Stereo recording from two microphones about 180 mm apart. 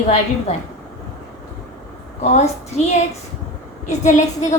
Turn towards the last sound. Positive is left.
turn(degrees=40)  # may be behind; listen again after turning